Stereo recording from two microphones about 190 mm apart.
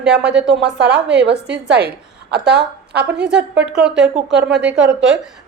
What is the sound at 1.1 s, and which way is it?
A woman's voice, 65° right (ahead or behind).